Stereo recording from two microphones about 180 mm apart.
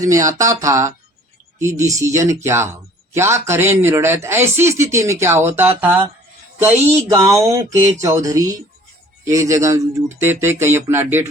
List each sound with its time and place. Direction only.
0.0 s speech: 15° right (ahead or behind)